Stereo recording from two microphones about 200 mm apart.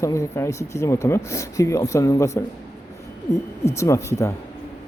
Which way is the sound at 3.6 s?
15° left (ahead or behind).